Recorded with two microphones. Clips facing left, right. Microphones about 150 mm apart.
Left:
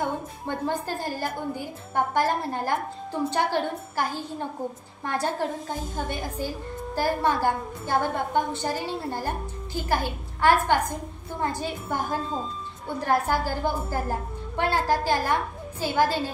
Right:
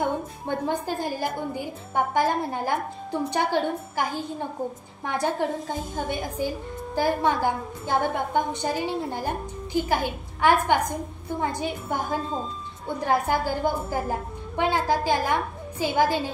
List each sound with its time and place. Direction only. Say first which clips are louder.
0.5 s a woman's voice: right 1 dB; 15° right (ahead or behind)